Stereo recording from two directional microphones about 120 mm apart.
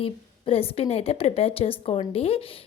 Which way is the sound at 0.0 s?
50° left (ahead or behind).